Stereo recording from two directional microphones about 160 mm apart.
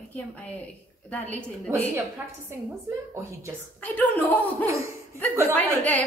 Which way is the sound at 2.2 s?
10° right (ahead or behind).